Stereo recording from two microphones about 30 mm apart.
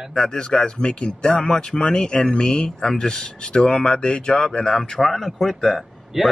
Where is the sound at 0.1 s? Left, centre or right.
Left.